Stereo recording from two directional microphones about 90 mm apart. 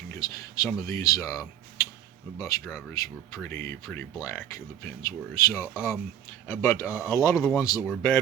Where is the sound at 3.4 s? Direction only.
25° left (ahead or behind).